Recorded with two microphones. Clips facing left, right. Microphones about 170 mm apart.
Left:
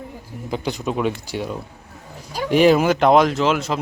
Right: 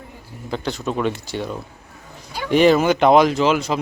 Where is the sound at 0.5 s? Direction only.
10° left (ahead or behind).